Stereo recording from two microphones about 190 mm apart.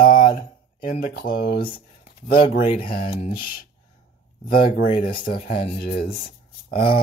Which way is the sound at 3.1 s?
30° left (ahead or behind).